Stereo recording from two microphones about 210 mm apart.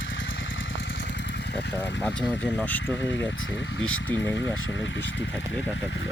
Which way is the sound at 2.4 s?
5° left (ahead or behind).